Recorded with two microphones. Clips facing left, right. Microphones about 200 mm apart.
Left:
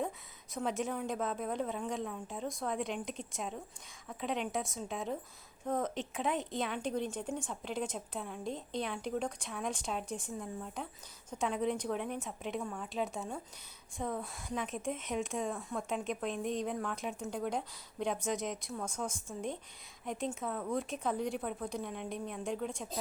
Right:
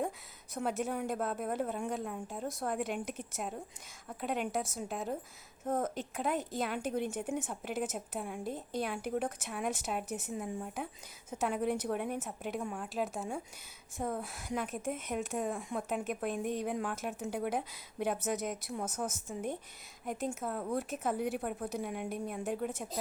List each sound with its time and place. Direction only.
0.5 s a woman's voice: centre (ahead or behind)